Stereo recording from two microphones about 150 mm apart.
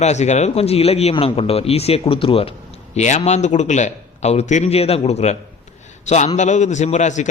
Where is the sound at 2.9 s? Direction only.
50° left (ahead or behind).